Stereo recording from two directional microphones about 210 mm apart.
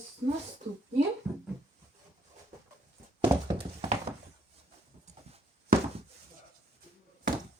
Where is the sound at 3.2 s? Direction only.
25° right (ahead or behind).